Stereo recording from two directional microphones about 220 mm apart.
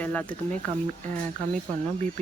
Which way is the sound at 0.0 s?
5° left (ahead or behind).